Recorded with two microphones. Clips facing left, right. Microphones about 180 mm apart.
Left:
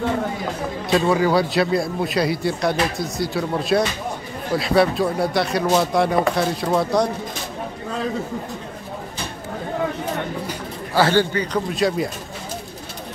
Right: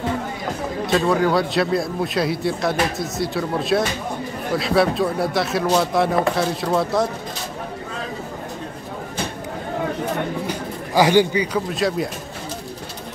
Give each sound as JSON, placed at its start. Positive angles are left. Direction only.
{"t": 0.8, "sound": "speech", "side_deg": 0}
{"t": 11.0, "sound": "a man's voice", "side_deg": -15}
{"t": 11.7, "sound": "speech", "side_deg": 0}